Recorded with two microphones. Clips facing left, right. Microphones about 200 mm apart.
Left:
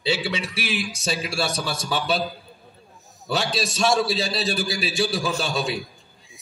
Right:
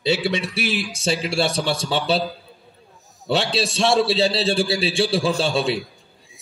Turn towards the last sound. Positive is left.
turn(degrees=-30)  # may be behind; listen again after turning